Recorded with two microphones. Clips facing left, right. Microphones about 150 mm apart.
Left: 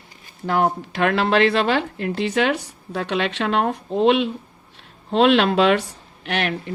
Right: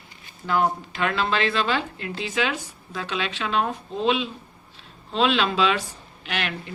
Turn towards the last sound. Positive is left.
turn(degrees=55)  # may be behind; listen again after turning